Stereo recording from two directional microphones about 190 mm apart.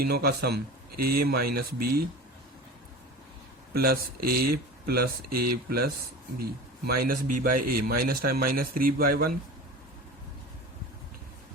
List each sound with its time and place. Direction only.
0.0 s speech: 55° right (ahead or behind)
3.8 s speech: 55° right (ahead or behind)